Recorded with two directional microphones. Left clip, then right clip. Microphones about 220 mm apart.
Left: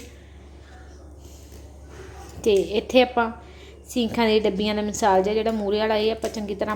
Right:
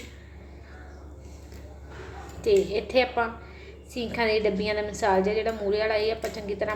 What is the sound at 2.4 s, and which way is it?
A woman's voice, 40° left (ahead or behind).